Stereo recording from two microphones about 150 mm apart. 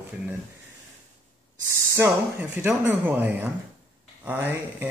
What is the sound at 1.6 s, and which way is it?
Speech, 15° right (ahead or behind).